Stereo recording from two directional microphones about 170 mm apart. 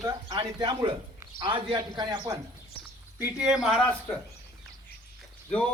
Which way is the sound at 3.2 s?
5° right (ahead or behind).